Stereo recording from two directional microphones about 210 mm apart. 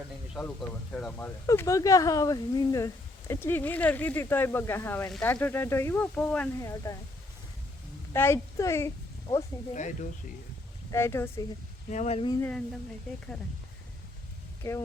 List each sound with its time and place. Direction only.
0.3 s speech: 5° left (ahead or behind)
8.1 s a child's voice: 10° left (ahead or behind)
9.7 s speech: 35° left (ahead or behind)
10.9 s speech: 10° left (ahead or behind)
11.9 s speech: 35° left (ahead or behind)